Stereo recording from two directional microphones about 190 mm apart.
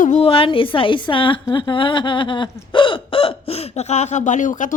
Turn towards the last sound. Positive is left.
turn(degrees=40)  # may be behind; listen again after turning